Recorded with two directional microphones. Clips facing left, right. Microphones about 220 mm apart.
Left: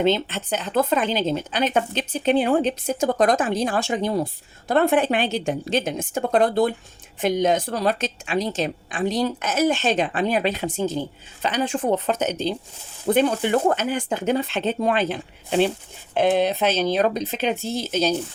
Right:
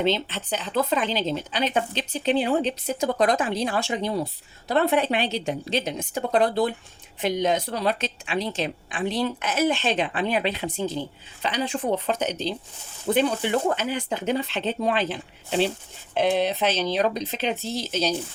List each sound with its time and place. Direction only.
0.0 s speech: 50° left (ahead or behind)